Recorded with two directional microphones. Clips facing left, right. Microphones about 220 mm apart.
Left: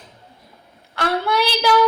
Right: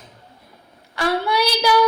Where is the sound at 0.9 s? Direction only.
Centre (ahead or behind).